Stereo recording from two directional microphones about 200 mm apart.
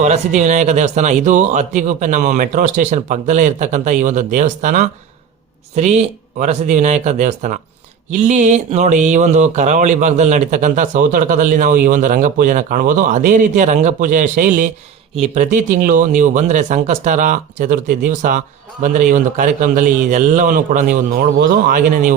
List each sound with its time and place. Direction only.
0.0 s speech: 35° right (ahead or behind)